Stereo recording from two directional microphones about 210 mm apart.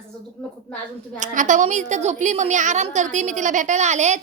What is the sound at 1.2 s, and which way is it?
A woman's voice, 35° right (ahead or behind).